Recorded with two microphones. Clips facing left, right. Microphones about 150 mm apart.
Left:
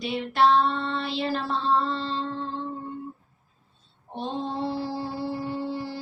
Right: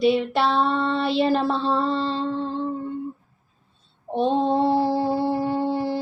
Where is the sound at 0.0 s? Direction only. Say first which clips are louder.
Right 3 dB; 70° right (ahead or behind).